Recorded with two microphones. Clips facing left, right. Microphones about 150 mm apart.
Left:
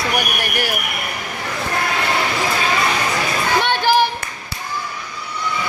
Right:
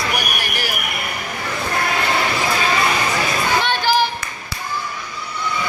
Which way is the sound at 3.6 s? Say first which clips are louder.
Left 2 dB; 55° left (ahead or behind).